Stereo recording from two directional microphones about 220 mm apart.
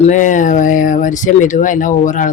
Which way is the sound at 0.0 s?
35° left (ahead or behind).